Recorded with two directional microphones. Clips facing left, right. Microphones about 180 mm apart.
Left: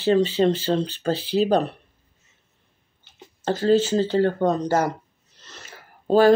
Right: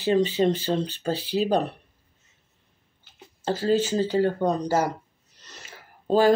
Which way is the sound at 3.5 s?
10° right (ahead or behind).